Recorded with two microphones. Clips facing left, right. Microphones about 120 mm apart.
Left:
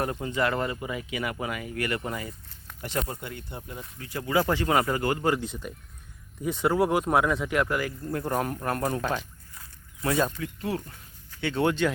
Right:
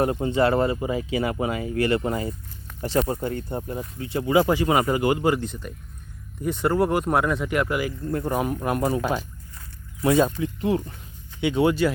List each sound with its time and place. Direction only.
0.0 s speech: 25° right (ahead or behind)
4.0 s speech: 20° right (ahead or behind)
5.2 s speech: centre (ahead or behind)
10.0 s speech: 20° right (ahead or behind)